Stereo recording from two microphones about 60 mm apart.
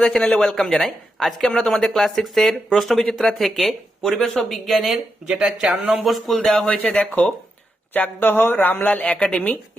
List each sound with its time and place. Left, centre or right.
0.0 s speech: centre
5.3 s speech: centre
6.8 s speech: centre
7.9 s speech: left